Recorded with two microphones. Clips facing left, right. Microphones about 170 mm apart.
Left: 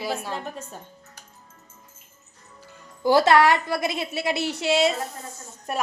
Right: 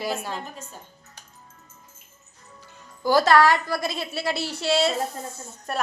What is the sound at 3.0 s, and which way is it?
A woman's voice, 25° left (ahead or behind).